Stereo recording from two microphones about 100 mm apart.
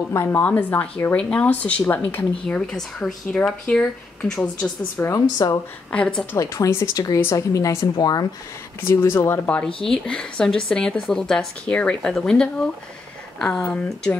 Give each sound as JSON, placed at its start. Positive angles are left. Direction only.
{"t": 0.1, "sound": "speech", "side_deg": 25}
{"t": 2.4, "sound": "speech", "side_deg": 5}
{"t": 5.1, "sound": "speech", "side_deg": 35}
{"t": 5.9, "sound": "speech", "side_deg": 10}
{"t": 6.3, "sound": "speech", "side_deg": 35}
{"t": 7.8, "sound": "speech", "side_deg": 45}
{"t": 8.8, "sound": "speech", "side_deg": 25}
{"t": 9.8, "sound": "speech", "side_deg": 10}